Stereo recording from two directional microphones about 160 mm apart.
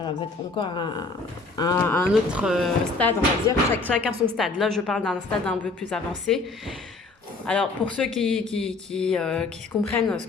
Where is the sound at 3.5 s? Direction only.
25° left (ahead or behind).